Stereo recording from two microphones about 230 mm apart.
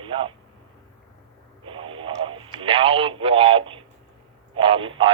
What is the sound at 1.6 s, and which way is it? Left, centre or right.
Radio, right.